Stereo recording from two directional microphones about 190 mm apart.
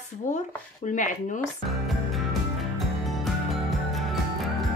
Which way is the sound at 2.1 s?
Centre (ahead or behind).